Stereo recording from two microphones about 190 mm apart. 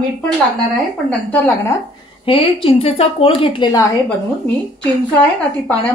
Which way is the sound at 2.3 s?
30° left (ahead or behind).